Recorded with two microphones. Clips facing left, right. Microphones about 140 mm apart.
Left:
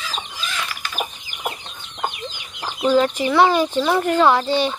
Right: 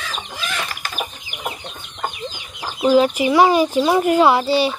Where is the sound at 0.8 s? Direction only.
40° right (ahead or behind).